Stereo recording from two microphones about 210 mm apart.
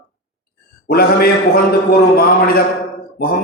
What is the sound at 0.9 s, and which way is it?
A man's voice, 45° left (ahead or behind).